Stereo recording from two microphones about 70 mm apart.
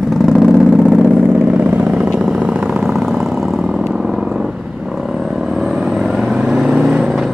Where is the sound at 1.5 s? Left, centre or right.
Right; by 4.4 s centre.